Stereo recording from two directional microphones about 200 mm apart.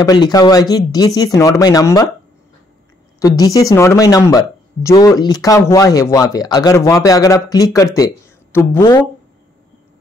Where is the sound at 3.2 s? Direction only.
15° left (ahead or behind).